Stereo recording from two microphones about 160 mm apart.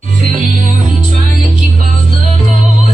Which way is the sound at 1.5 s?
50° right (ahead or behind).